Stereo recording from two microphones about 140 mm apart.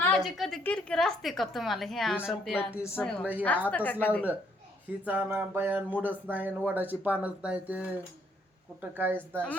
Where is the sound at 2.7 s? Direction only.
15° left (ahead or behind).